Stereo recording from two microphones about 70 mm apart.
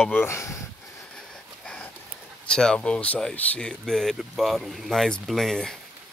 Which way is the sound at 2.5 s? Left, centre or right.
Centre.